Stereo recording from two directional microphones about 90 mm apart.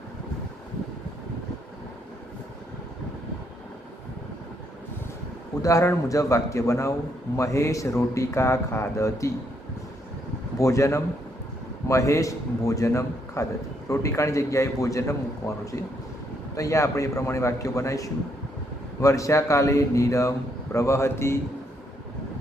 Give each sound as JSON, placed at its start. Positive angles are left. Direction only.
{"t": 5.6, "sound": "a man's voice", "side_deg": 35}
{"t": 10.6, "sound": "a man's voice", "side_deg": 35}